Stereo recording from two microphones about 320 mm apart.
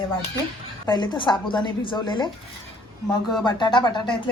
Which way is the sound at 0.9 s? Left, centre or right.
Centre.